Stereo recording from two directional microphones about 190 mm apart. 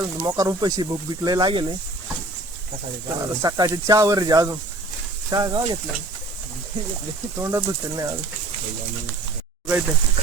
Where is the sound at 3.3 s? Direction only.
20° right (ahead or behind).